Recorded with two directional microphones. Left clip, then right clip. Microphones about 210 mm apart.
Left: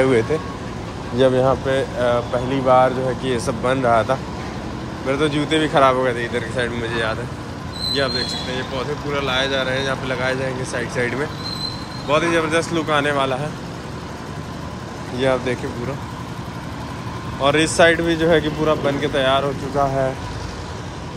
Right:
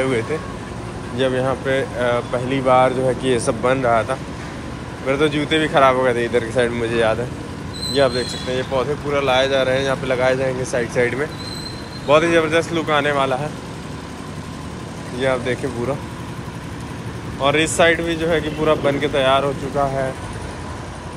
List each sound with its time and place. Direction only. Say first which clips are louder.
1.2 s speech: left 3 dB; 15° left (ahead or behind)
15.1 s speech: left 1 dB; 15° left (ahead or behind)
17.4 s speech: left 1 dB; 15° left (ahead or behind)
18.6 s speech: right 2 dB; 10° left (ahead or behind)